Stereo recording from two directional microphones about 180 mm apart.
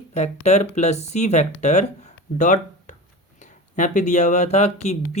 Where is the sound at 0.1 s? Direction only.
40° left (ahead or behind).